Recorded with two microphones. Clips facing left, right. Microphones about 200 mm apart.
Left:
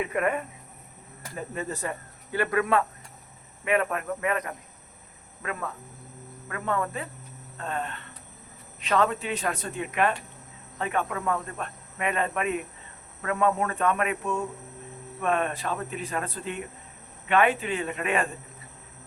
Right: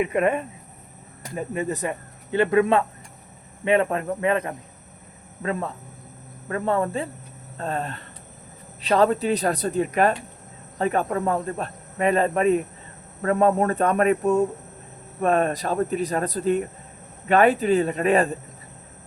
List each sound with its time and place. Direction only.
0.0 s speech: 25° right (ahead or behind)